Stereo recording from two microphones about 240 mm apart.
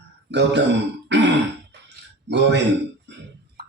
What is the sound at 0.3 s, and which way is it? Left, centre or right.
Speech, right.